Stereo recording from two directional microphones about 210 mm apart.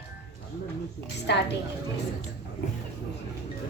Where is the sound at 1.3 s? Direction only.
55° left (ahead or behind).